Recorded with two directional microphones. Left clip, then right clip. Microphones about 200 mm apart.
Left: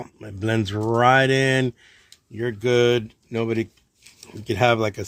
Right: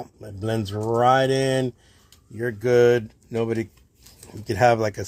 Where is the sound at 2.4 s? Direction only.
25° left (ahead or behind).